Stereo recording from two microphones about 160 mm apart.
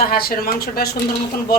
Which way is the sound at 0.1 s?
70° left (ahead or behind).